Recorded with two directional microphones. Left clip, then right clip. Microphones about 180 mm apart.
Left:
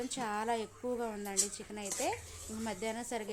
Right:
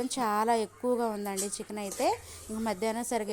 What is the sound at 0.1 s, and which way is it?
Speech, 35° right (ahead or behind).